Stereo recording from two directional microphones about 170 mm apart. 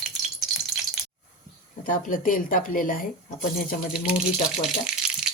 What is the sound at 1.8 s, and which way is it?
Speech, 50° left (ahead or behind).